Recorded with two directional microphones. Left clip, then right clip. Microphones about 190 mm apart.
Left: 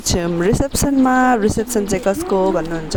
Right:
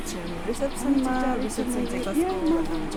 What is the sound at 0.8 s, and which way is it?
Speech, 55° left (ahead or behind).